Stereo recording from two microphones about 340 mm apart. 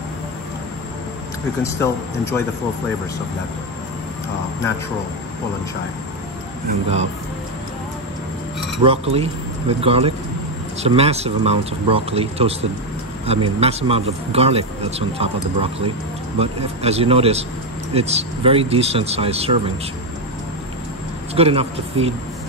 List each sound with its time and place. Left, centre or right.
1.6 s speech: centre
8.8 s speech: centre
21.4 s speech: centre